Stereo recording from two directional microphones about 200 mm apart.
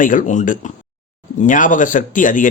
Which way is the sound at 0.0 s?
40° left (ahead or behind).